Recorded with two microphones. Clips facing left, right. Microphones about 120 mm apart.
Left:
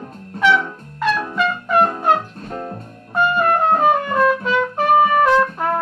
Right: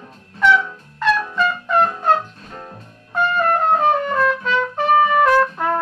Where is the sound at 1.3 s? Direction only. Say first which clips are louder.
Left 1 dB; 10° left (ahead or behind).